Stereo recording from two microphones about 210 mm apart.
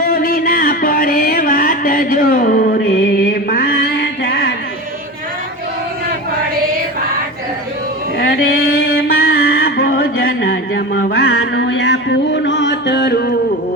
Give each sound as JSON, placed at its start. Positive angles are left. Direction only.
{"t": 0.0, "sound": "mantra", "side_deg": 45}
{"t": 3.5, "sound": "music", "side_deg": 45}
{"t": 9.0, "sound": "a sound", "side_deg": 45}